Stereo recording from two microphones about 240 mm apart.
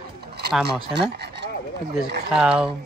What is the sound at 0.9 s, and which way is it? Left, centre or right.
Speech, right.